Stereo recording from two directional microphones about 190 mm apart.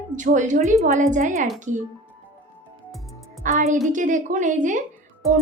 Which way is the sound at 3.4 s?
40° right (ahead or behind).